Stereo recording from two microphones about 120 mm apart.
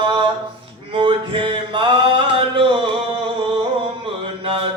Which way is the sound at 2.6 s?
50° right (ahead or behind).